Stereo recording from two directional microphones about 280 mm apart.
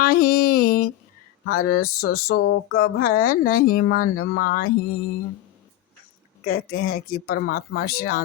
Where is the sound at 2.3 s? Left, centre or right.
Left.